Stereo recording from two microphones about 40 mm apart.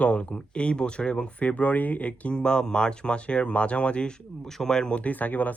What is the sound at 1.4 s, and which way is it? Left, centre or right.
Speech, left.